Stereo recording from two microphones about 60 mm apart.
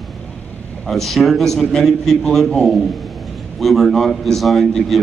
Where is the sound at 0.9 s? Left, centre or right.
Centre.